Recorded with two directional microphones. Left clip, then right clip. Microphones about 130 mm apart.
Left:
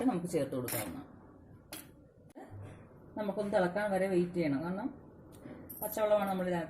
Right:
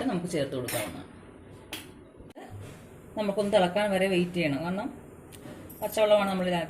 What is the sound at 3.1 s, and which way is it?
A woman's voice, 35° left (ahead or behind).